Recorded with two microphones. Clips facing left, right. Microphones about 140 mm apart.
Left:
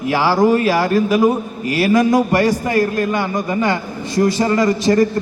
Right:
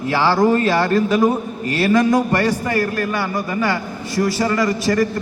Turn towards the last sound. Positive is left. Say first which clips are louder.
# left 4 dB
turn(degrees=25)  # may be behind; listen again after turning